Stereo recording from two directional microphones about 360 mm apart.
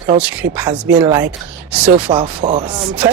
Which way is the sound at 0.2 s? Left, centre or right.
Centre.